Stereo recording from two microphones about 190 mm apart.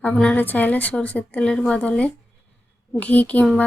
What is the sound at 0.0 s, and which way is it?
Speech, 5° left (ahead or behind).